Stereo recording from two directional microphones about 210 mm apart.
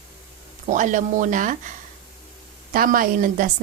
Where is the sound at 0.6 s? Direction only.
35° right (ahead or behind).